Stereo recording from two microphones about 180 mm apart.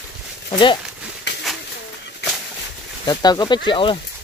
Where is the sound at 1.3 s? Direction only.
75° left (ahead or behind).